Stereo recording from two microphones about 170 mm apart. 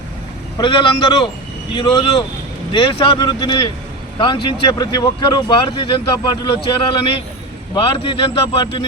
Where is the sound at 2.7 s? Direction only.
30° left (ahead or behind).